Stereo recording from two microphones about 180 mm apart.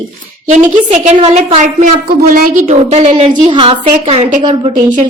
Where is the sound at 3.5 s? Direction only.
30° right (ahead or behind).